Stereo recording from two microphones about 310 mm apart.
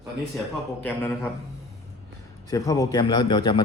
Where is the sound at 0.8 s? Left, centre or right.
Centre.